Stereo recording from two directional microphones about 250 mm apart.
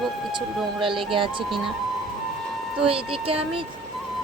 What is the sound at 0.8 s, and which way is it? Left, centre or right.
Speech, centre.